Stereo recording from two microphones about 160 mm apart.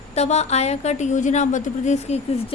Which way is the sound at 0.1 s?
40° left (ahead or behind).